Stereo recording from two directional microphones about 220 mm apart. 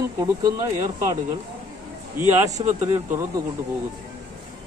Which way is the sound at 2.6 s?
20° right (ahead or behind).